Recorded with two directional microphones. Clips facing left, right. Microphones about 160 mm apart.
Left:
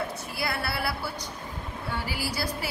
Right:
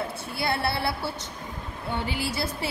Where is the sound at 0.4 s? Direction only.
25° right (ahead or behind).